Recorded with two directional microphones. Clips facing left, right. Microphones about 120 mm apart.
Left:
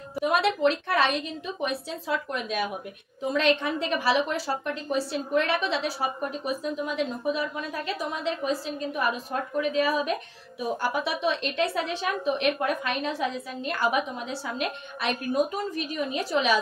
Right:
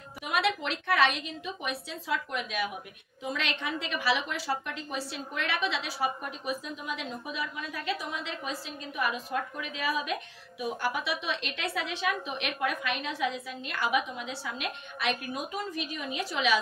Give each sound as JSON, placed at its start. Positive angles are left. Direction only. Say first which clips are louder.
{"t": 0.2, "sound": "a woman's voice", "louder": "left 7 dB", "side_deg": 40}